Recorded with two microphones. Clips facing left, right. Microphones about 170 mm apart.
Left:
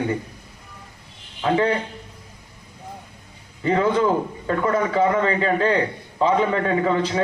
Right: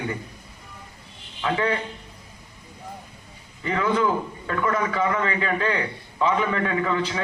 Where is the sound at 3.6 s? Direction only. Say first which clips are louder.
Left 4 dB; 35° left (ahead or behind).